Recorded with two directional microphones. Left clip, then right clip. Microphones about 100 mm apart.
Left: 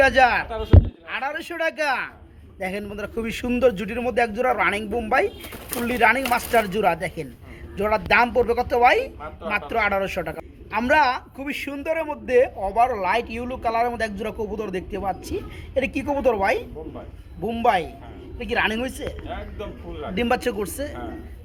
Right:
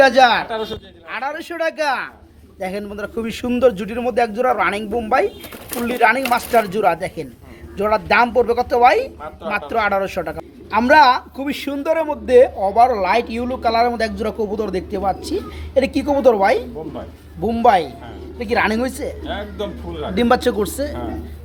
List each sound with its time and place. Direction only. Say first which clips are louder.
0.0 s a woman's voice: right 5 dB; centre (ahead or behind)
19.3 s speech: right 8 dB; 85° right
20.1 s a woman's voice: right 7 dB; 15° right (ahead or behind)